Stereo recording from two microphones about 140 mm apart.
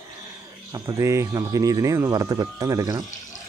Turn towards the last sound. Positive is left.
turn(degrees=-25)  # may be behind; listen again after turning